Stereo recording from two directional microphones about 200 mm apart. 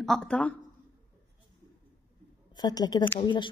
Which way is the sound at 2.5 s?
20° left (ahead or behind).